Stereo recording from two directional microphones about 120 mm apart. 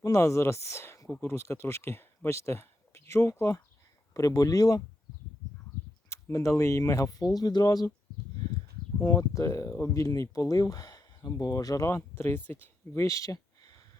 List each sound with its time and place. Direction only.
0.0 s speech: 25° left (ahead or behind)
6.1 s speech: 25° left (ahead or behind)
9.0 s speech: 25° left (ahead or behind)